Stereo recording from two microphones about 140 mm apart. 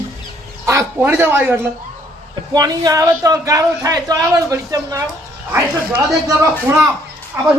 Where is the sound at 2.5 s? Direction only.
30° right (ahead or behind).